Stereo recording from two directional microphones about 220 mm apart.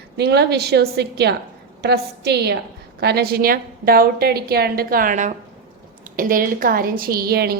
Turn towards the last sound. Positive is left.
turn(degrees=-45)  # may be behind; listen again after turning